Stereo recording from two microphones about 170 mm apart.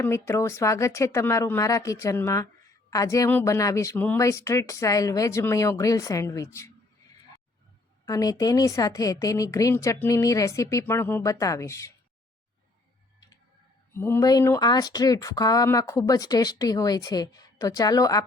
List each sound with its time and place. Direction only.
0.0 s speech: 15° left (ahead or behind)
8.0 s speech: 20° left (ahead or behind)
13.9 s speech: 15° left (ahead or behind)